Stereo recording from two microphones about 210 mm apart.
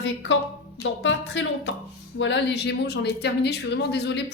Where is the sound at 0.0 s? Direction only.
65° left (ahead or behind).